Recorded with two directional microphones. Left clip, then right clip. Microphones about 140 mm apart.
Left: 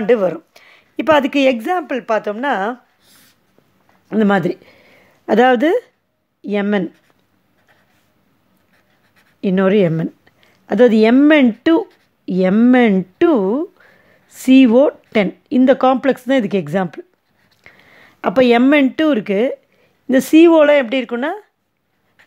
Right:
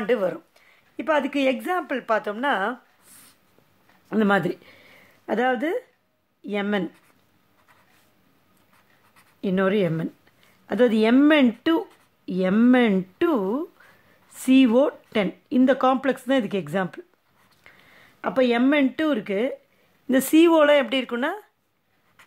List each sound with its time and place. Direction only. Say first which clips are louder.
0.0 s speech: left 9 dB; 35° left (ahead or behind)
0.6 s a woman's voice: left 11 dB; 60° left (ahead or behind); by 2.8 s 30° left (ahead or behind)
4.1 s speech: left 6 dB; 25° left (ahead or behind)
5.2 s speech: left 11 dB; 45° left (ahead or behind)
6.4 s speech: left 8 dB; 35° left (ahead or behind)
9.4 s speech: left 8 dB; 30° left (ahead or behind)
17.6 s a sound: left 7 dB; 30° left (ahead or behind)
18.0 s speech: left 9 dB; 45° left (ahead or behind)
20.1 s speech: left 8 dB; 20° left (ahead or behind)